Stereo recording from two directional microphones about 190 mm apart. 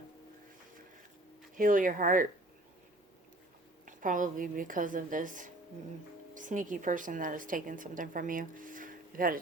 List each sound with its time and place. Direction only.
1.5 s a woman's voice: 45° right (ahead or behind)
3.8 s a woman's voice: 45° right (ahead or behind)